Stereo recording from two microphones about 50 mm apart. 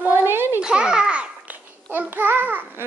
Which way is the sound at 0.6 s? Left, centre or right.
Centre.